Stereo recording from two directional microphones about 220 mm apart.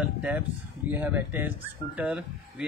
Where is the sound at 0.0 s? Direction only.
5° right (ahead or behind).